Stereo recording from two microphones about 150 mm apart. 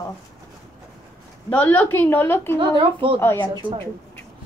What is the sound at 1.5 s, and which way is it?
A woman's voice, 10° left (ahead or behind).